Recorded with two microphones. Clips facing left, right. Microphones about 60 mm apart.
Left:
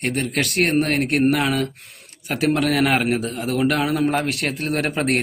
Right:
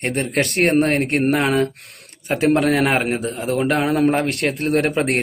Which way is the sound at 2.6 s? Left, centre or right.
Right.